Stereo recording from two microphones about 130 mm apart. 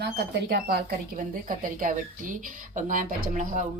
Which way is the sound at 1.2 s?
90° right.